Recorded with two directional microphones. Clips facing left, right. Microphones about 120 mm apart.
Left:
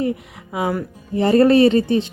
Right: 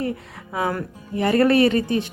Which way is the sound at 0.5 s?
15° left (ahead or behind).